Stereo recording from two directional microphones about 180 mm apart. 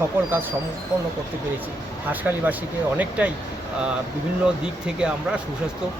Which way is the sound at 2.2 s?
10° right (ahead or behind).